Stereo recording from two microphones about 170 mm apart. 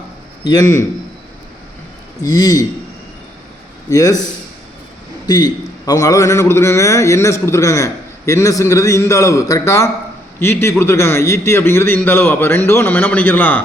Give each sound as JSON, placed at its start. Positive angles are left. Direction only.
{"t": 0.4, "sound": "a man's voice", "side_deg": 20}
{"t": 2.2, "sound": "a man's voice", "side_deg": 20}
{"t": 3.8, "sound": "a man's voice", "side_deg": 20}
{"t": 5.2, "sound": "a man's voice", "side_deg": 20}